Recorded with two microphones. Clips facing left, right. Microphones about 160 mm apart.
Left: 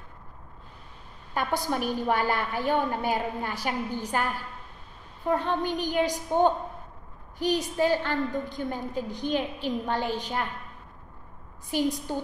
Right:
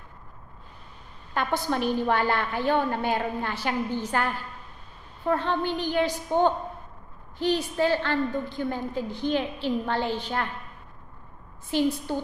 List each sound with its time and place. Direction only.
1.3 s a woman's voice: 10° left (ahead or behind)
5.3 s a woman's voice: 15° left (ahead or behind)
11.7 s a woman's voice: 15° left (ahead or behind)